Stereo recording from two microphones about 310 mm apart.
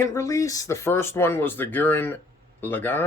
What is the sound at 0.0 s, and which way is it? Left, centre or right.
Speech, centre.